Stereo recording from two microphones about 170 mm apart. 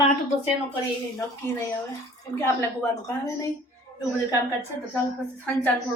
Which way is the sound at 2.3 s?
15° left (ahead or behind).